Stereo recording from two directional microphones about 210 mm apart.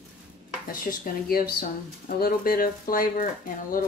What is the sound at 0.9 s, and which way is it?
Speech, 45° left (ahead or behind).